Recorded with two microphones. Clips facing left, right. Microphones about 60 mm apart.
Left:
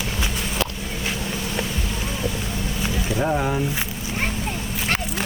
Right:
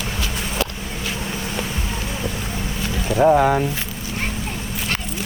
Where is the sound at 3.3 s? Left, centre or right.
Right.